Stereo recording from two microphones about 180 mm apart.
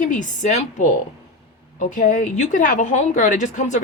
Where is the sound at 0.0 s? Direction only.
45° left (ahead or behind).